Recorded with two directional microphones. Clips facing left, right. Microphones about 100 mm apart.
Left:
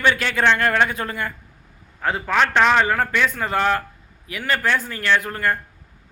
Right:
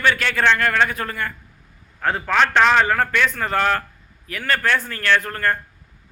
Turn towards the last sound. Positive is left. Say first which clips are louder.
# right 1 dB
turn(degrees=15)  # may be behind; listen again after turning